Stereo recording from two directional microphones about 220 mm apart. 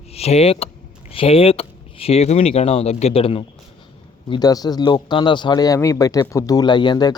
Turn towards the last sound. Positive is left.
turn(degrees=20)  # may be behind; listen again after turning